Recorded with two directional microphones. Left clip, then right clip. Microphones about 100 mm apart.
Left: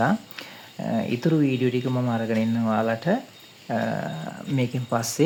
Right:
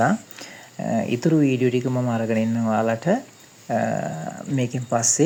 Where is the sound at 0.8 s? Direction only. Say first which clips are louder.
Right 3 dB; 25° right (ahead or behind).